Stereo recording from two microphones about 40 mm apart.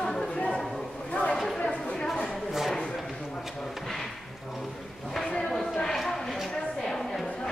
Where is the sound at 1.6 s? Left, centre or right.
Left.